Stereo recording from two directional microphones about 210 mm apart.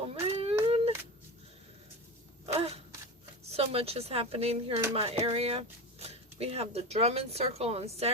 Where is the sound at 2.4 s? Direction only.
30° right (ahead or behind).